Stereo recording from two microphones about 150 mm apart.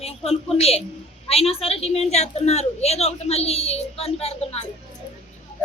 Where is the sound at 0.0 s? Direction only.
40° left (ahead or behind).